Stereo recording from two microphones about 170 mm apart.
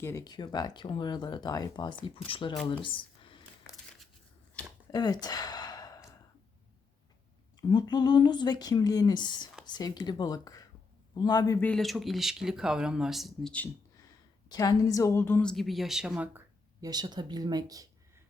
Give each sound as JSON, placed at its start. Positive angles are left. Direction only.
{"t": 0.0, "sound": "speech", "side_deg": 15}
{"t": 4.9, "sound": "a sound", "side_deg": 20}
{"t": 7.7, "sound": "speech", "side_deg": 25}
{"t": 11.6, "sound": "speech", "side_deg": 5}
{"t": 14.5, "sound": "speech", "side_deg": 20}
{"t": 16.8, "sound": "speech", "side_deg": -25}